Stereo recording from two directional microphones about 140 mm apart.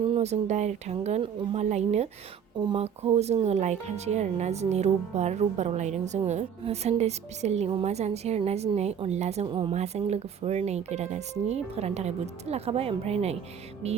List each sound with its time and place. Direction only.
0.0 s speech: 45° right (ahead or behind)
9.5 s speech: 40° right (ahead or behind)
9.7 s speech: 50° right (ahead or behind)